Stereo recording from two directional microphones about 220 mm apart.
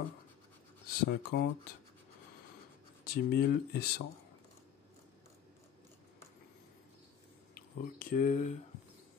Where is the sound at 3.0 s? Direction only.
45° left (ahead or behind).